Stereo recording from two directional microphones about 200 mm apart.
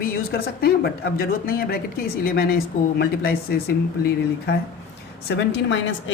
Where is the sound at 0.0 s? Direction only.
50° left (ahead or behind); by 6.1 s 70° left (ahead or behind).